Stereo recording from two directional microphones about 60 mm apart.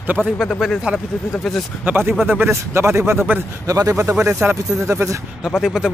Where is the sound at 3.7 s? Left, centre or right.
Right.